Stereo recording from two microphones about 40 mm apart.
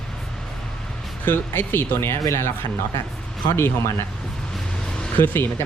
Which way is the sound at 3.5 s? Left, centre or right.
Left.